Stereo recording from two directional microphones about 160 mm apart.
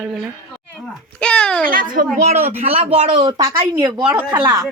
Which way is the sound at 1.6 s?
60° right (ahead or behind).